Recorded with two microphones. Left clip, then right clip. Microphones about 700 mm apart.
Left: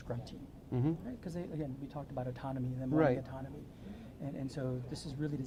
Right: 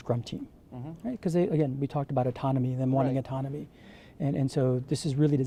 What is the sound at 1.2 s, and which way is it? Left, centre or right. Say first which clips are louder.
Speech: right 15 dB; right.